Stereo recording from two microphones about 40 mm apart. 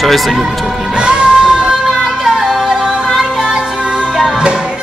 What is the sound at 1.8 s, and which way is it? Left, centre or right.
Yodeling, centre.